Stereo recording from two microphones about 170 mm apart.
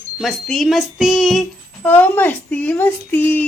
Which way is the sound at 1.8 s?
10° left (ahead or behind).